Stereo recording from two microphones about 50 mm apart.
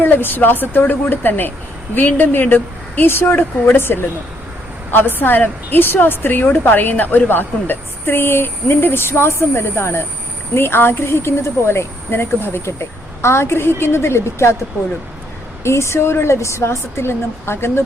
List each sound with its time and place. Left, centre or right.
0.0 s a woman's voice: left
15.6 s speech: left